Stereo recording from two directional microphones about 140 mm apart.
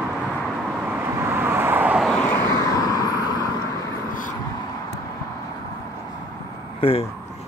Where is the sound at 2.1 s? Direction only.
20° left (ahead or behind).